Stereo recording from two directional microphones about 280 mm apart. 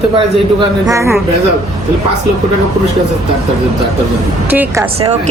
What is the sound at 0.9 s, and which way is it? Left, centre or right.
Speech, centre.